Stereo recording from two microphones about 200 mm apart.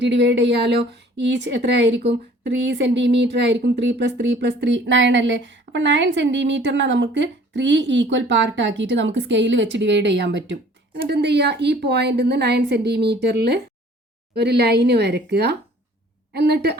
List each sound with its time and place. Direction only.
0.0 s a woman's voice: 60° right (ahead or behind)